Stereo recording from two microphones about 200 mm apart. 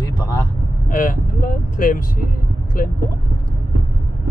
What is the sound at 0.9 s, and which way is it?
Speech, 40° left (ahead or behind).